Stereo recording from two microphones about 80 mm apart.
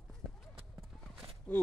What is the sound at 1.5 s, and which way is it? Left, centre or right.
Speech, centre.